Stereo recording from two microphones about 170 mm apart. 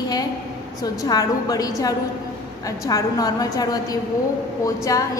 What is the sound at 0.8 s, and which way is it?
A woman's voice, 20° left (ahead or behind).